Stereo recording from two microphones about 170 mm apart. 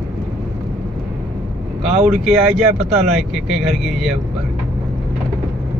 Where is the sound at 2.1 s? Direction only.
Centre (ahead or behind).